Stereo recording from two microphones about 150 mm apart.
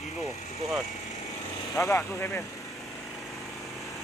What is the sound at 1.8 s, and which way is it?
Speech, 15° left (ahead or behind).